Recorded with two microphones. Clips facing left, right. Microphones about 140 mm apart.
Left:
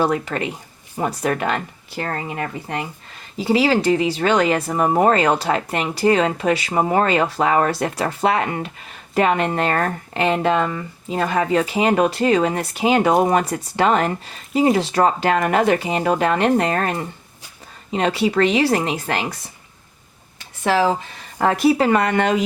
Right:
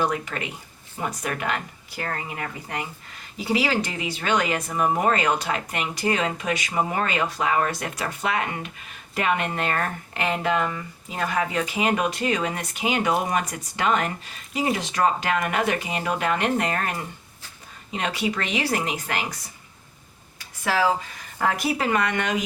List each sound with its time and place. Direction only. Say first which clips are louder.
0.0 s speech: left 6 dB; 35° left (ahead or behind)
20.4 s a sound: left 5 dB; 25° left (ahead or behind)
21.3 s speech: left 8 dB; 30° left (ahead or behind)